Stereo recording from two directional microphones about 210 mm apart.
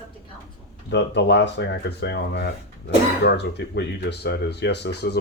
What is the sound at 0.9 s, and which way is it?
A man's voice, 55° left (ahead or behind).